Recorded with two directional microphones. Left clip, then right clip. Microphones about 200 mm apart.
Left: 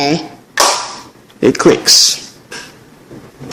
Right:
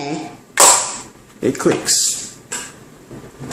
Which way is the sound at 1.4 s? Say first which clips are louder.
Left 8 dB; 45° left (ahead or behind).